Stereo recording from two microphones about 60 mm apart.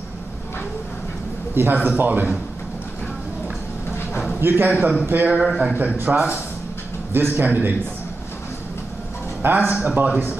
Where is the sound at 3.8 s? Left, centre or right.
Left.